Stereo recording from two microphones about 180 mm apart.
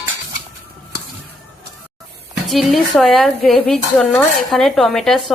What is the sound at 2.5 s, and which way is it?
Speech, centre (ahead or behind).